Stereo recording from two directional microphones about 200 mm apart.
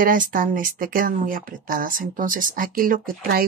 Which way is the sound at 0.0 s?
45° right (ahead or behind).